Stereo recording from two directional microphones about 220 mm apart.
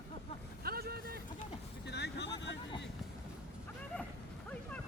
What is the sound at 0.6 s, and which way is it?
Vehicle, 45° right (ahead or behind).